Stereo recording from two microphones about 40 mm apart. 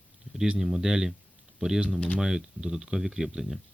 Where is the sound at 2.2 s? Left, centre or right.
Centre.